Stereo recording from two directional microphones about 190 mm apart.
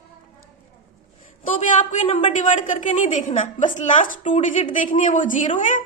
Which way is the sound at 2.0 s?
30° left (ahead or behind).